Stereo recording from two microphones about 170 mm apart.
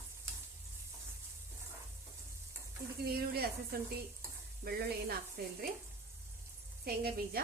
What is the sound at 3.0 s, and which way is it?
Speech, 65° right (ahead or behind).